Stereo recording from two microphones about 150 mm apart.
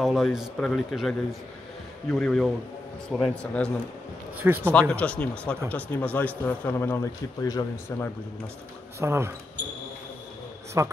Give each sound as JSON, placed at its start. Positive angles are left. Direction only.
{"t": 0.0, "sound": "speech", "side_deg": 0}
{"t": 2.1, "sound": "speech", "side_deg": 5}
{"t": 4.4, "sound": "speech", "side_deg": -10}
{"t": 4.7, "sound": "speech", "side_deg": 10}
{"t": 9.0, "sound": "speech", "side_deg": -15}
{"t": 10.8, "sound": "speech", "side_deg": -20}